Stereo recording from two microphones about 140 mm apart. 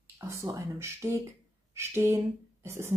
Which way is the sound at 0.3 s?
20° right (ahead or behind).